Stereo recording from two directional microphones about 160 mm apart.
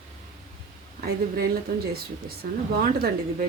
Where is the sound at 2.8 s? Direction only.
65° right (ahead or behind).